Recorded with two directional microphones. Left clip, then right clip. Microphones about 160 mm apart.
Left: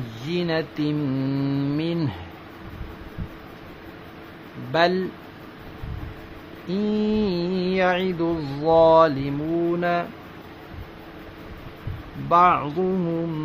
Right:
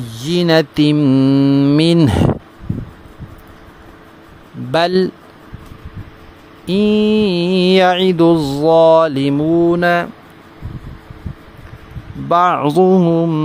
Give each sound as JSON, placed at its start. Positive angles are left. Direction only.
{"t": 0.3, "sound": "mantra", "side_deg": -80}
{"t": 4.7, "sound": "speech", "side_deg": -90}
{"t": 6.7, "sound": "mantra", "side_deg": -60}
{"t": 12.3, "sound": "mantra", "side_deg": -80}